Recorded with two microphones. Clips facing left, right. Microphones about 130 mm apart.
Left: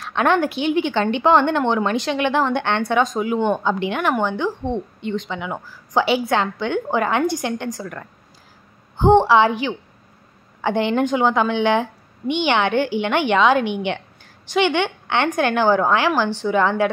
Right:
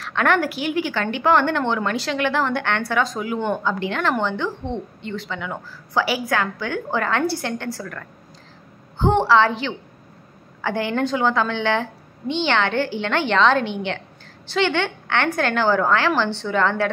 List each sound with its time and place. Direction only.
0.0 s a woman's voice: 20° left (ahead or behind)